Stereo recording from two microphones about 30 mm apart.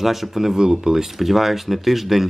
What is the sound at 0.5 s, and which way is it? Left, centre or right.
Speech, right.